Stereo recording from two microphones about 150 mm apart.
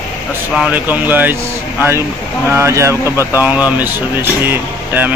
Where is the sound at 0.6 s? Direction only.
10° right (ahead or behind).